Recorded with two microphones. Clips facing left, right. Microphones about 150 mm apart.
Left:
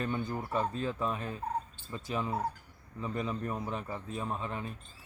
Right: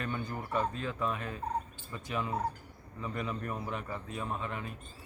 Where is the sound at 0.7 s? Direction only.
35° left (ahead or behind).